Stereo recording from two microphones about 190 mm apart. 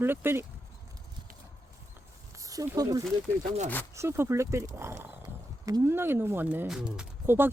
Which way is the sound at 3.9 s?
15° right (ahead or behind).